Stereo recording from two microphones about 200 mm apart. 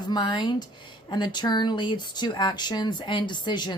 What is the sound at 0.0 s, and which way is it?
Speech, 20° left (ahead or behind).